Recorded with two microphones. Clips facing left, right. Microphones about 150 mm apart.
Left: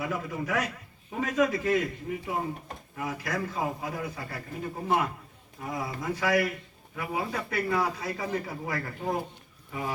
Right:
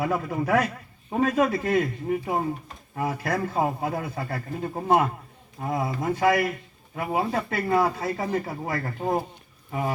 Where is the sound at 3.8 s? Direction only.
55° right (ahead or behind).